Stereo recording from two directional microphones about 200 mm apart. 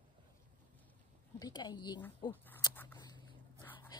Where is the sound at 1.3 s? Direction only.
20° left (ahead or behind).